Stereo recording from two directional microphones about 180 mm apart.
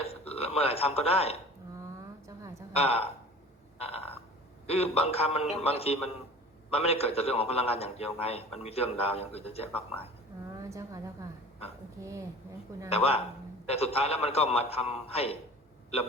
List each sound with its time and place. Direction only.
0.0 s speech: 35° left (ahead or behind)
2.2 s a sound: 15° right (ahead or behind)
2.7 s a man's voice: 35° left (ahead or behind)
3.8 s a sound: 35° left (ahead or behind)
4.6 s a man's voice: 35° left (ahead or behind)
10.6 s a woman's voice: 20° right (ahead or behind)
12.9 s a man's voice: 35° left (ahead or behind)